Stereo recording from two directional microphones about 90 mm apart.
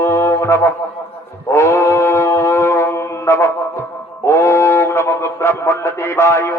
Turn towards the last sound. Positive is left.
turn(degrees=30)  # may be behind; listen again after turning